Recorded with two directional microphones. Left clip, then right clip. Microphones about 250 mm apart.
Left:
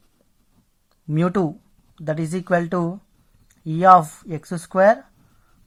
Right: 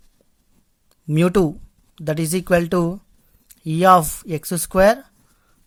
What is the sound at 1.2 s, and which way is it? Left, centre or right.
Speech, right.